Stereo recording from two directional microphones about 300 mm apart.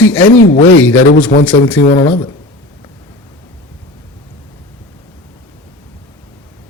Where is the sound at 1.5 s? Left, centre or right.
Centre.